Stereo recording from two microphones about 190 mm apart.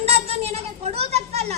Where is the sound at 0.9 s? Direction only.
35° right (ahead or behind).